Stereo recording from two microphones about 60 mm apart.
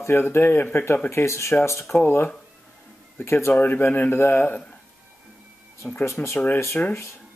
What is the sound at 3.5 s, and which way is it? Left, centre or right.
A man's voice, left.